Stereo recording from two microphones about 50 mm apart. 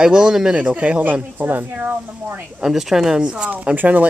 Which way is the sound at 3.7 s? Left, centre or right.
Right.